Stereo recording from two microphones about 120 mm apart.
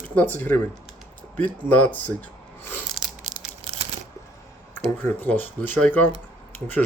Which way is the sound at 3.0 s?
Centre (ahead or behind).